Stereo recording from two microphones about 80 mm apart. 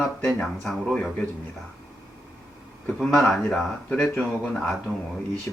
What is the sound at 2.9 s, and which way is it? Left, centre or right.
Speech, centre.